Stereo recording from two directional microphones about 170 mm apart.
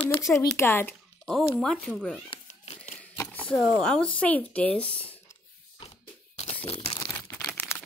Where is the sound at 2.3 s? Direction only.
30° left (ahead or behind).